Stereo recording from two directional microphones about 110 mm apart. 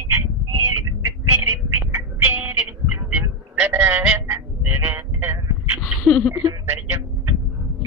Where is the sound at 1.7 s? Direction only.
15° right (ahead or behind).